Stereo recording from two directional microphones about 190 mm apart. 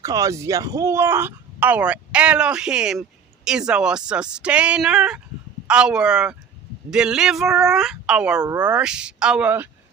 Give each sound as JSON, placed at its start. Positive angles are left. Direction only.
{"t": 0.0, "sound": "speech", "side_deg": -15}
{"t": 8.4, "sound": "speech", "side_deg": -20}
{"t": 8.7, "sound": "speech", "side_deg": -5}